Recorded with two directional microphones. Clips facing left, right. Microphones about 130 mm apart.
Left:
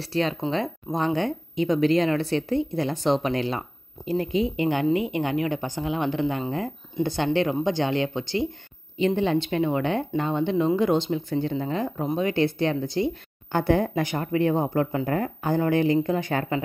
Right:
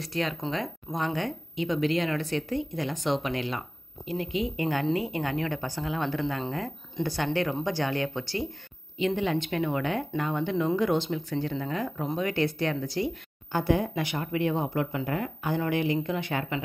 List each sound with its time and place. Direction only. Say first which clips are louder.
0.0 s speech: left 5 dB; 30° left (ahead or behind)
4.6 s speech: left 3 dB; 20° left (ahead or behind)
8.9 s speech: left 4 dB; 35° left (ahead or behind)
13.5 s speech: left 4 dB; 55° left (ahead or behind); by 16.6 s 40° left (ahead or behind)